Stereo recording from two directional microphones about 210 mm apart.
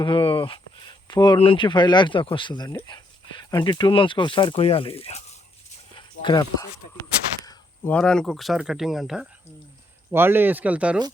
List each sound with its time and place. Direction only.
0.0 s speech: 25° left (ahead or behind)
7.4 s speech: 5° left (ahead or behind)